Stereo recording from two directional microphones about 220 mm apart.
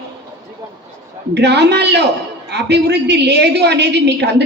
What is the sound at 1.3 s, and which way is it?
A woman's voice, 50° right (ahead or behind).